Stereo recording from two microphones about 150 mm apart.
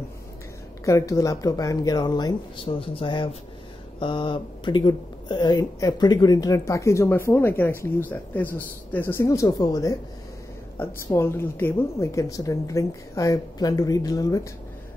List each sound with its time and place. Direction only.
0.8 s speech: 20° left (ahead or behind)
11.1 s speech: 15° left (ahead or behind)